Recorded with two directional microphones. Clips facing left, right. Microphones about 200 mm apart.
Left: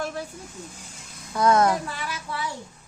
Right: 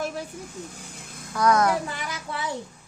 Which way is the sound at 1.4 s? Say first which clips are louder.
Left 1 dB; 25° left (ahead or behind).